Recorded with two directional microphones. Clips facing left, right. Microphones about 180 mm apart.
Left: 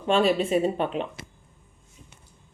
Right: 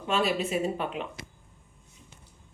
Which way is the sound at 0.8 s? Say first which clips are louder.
Left 6 dB; 35° left (ahead or behind).